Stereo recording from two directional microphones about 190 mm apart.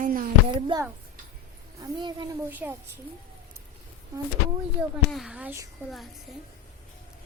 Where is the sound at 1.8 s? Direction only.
25° right (ahead or behind).